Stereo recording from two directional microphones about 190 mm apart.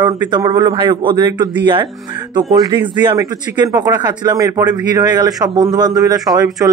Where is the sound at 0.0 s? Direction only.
20° right (ahead or behind).